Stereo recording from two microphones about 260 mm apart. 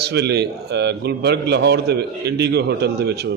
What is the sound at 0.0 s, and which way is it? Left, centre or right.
A man's voice, right.